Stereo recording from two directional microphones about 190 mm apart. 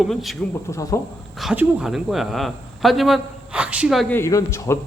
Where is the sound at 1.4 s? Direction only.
Centre (ahead or behind).